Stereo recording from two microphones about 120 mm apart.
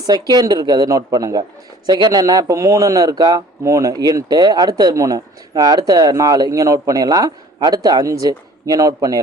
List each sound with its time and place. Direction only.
0.0 s a man's voice: 35° right (ahead or behind)